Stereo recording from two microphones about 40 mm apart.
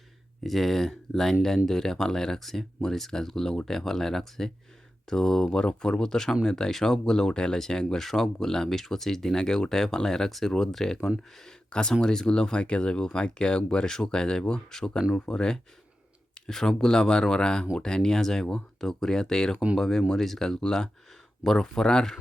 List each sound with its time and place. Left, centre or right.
0.4 s speech: centre
11.7 s speech: left